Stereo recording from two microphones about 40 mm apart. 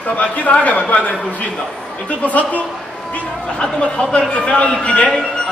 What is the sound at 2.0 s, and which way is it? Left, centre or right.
Speech, left.